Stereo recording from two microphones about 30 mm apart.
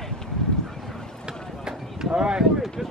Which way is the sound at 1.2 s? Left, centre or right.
Right.